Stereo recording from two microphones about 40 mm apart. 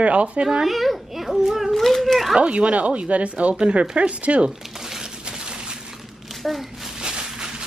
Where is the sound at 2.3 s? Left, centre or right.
Right.